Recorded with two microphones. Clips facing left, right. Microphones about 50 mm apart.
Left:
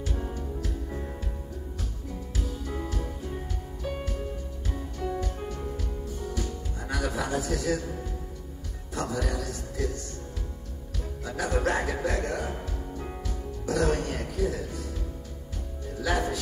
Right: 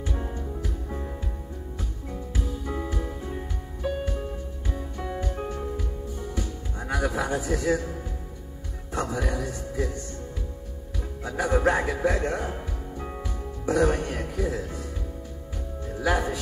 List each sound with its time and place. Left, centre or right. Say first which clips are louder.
0.0 s music: right 1 dB; right
2.3 s music: right 3 dB; centre
8.9 s a man's voice: right 2 dB; right
11.2 s a man's voice: right 4 dB; right
12.5 s music: right 1 dB; centre
15.9 s music: right 3 dB; right